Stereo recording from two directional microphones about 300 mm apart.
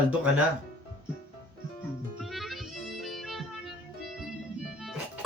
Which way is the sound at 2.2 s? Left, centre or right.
Centre.